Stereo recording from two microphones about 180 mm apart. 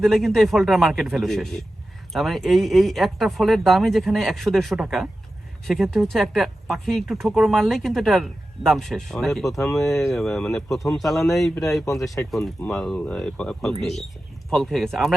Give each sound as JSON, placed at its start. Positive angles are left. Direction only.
{"t": 0.0, "sound": "speech", "side_deg": 0}